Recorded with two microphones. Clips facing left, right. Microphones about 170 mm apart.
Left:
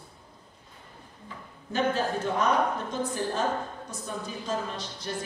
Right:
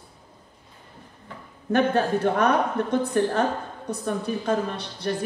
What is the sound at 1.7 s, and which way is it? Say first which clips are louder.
A woman's voice: right 6 dB; 60° right (ahead or behind).